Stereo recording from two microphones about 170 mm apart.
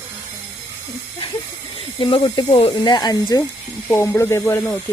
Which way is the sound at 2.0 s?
30° left (ahead or behind).